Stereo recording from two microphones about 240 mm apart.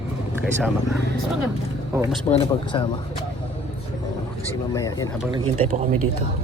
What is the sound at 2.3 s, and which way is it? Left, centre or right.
Speech, left.